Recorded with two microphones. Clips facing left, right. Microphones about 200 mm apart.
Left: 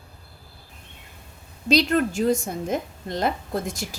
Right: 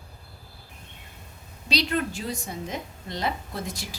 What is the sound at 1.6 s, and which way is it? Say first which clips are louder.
A woman's voice: left 7 dB; 45° left (ahead or behind).